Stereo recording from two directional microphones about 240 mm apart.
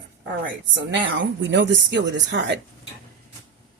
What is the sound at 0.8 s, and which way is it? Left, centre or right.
Speech, right.